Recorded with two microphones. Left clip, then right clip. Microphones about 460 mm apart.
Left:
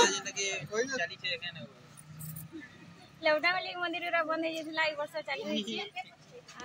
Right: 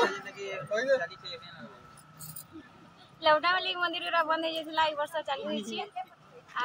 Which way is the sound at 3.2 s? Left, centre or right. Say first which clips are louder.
Right 3 dB; left.